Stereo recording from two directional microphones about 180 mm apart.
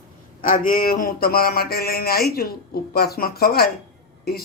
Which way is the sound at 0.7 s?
55° left (ahead or behind).